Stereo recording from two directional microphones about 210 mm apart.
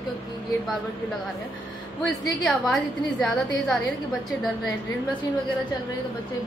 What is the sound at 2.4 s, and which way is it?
A woman's voice, centre (ahead or behind).